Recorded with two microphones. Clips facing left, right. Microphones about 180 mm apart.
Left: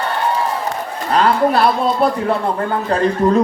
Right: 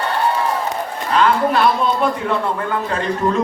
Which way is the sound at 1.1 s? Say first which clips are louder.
Left 2 dB; 35° left (ahead or behind).